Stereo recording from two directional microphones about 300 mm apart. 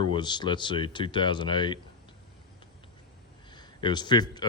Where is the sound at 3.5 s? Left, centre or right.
Centre.